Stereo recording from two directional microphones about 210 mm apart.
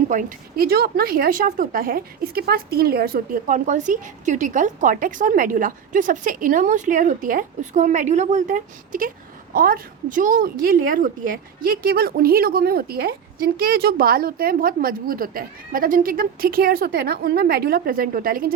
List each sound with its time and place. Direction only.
0.1 s a woman's voice: 40° right (ahead or behind)